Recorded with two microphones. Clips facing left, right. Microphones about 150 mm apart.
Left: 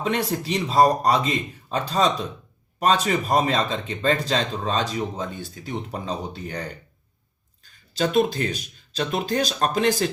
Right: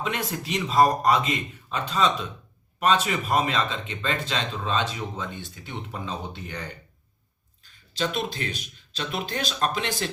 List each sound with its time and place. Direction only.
0.0 s speech: 35° left (ahead or behind)